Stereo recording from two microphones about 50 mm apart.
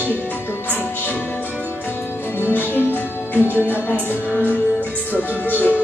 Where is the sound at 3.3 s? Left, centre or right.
Left.